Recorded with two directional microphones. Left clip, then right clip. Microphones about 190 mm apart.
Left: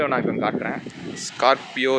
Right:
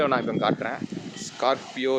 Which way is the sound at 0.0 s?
10° right (ahead or behind).